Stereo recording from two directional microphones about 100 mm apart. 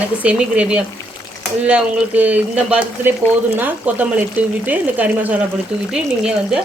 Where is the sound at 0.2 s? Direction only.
15° right (ahead or behind).